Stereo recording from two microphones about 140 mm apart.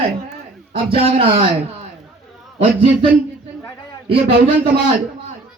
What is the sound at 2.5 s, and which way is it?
Speech, 50° right (ahead or behind).